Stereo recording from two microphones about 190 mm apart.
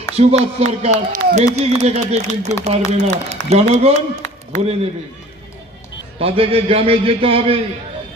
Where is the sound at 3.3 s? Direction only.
35° right (ahead or behind).